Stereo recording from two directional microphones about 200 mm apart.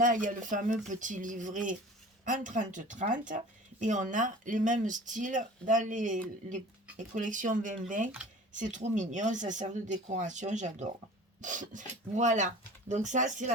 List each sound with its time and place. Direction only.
0.0 s speech: 40° right (ahead or behind)
11.3 s filing: 40° right (ahead or behind)
12.1 s speech: 35° right (ahead or behind)